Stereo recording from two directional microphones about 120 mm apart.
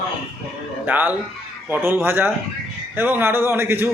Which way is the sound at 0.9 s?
15° right (ahead or behind).